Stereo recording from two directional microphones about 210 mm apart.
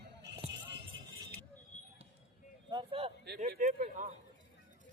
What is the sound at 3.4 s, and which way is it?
Speech, 35° right (ahead or behind).